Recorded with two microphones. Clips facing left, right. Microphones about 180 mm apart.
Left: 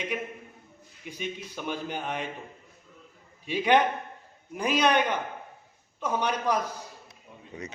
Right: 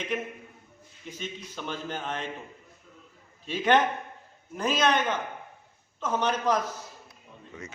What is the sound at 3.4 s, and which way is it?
A man's voice, 15° left (ahead or behind).